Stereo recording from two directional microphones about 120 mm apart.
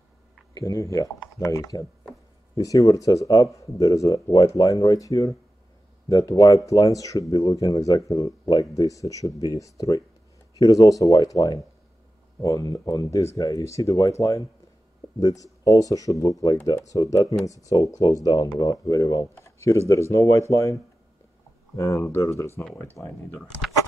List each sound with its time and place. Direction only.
0.6 s speech: 30° left (ahead or behind)
21.7 s speech: 25° left (ahead or behind)